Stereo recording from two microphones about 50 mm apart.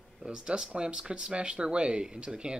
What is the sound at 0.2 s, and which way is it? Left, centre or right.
Speech, centre.